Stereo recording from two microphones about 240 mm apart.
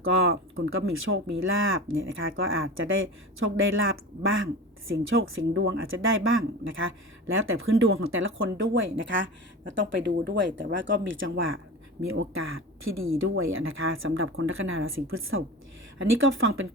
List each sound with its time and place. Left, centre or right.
0.0 s speech: right